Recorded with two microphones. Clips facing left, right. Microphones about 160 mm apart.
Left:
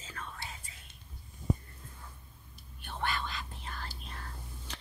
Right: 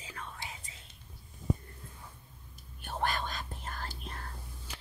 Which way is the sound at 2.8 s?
40° right (ahead or behind).